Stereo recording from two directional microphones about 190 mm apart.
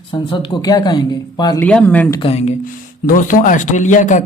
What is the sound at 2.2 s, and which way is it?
Speech, 35° left (ahead or behind).